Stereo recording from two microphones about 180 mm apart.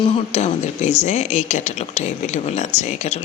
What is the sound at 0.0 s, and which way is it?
Speech, 40° left (ahead or behind).